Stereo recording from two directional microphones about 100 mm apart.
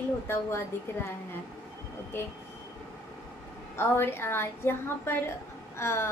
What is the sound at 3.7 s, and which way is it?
A woman's voice, 25° left (ahead or behind).